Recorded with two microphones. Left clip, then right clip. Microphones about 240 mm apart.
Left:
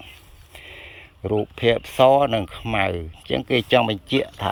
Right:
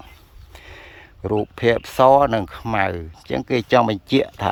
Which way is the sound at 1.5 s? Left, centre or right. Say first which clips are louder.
Right 2 dB; right.